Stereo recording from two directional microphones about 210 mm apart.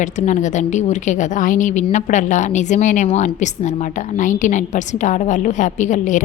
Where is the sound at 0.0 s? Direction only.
35° left (ahead or behind).